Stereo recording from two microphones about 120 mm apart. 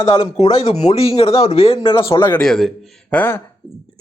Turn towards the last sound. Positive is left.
turn(degrees=20)  # may be behind; listen again after turning